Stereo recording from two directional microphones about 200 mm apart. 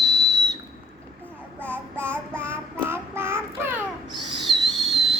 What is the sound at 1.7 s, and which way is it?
Child singing, 10° right (ahead or behind).